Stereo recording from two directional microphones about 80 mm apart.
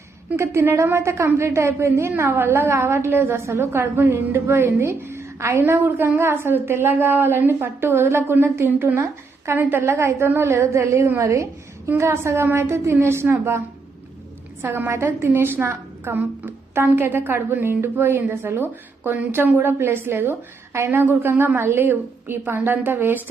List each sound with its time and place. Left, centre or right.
0.3 s a woman's voice: right
9.9 s a woman's voice: right
14.6 s a woman's voice: right